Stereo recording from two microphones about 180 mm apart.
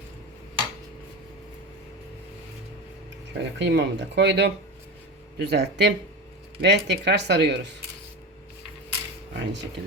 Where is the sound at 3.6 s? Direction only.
70° right (ahead or behind).